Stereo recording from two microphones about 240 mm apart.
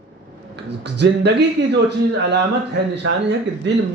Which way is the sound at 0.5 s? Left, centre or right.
Right.